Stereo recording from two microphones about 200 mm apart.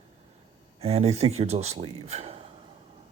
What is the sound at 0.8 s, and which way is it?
Speech, 30° right (ahead or behind).